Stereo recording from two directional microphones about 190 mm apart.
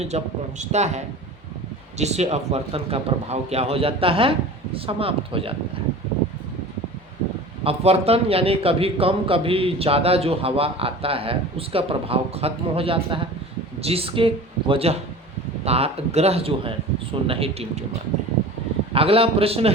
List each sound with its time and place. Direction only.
0.1 s a man's voice: 35° right (ahead or behind)
7.6 s a man's voice: 30° right (ahead or behind)
18.9 s speech: 30° right (ahead or behind)